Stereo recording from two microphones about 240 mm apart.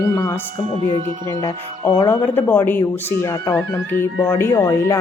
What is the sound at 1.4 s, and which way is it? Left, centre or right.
Speech, centre.